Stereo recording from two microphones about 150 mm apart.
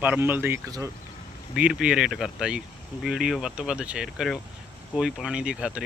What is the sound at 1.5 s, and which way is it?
Speech, 5° right (ahead or behind).